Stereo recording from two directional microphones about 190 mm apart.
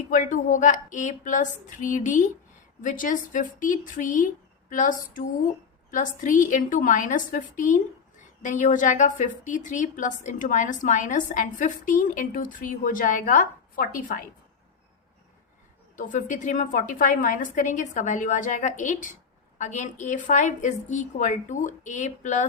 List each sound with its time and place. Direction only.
0.1 s a woman's voice: 45° left (ahead or behind)
16.0 s a woman's voice: 45° left (ahead or behind)